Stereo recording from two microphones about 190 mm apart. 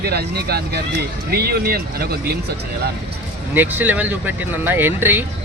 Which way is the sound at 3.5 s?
10° right (ahead or behind).